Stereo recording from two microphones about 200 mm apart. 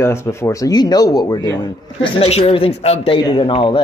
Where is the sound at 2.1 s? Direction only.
30° left (ahead or behind).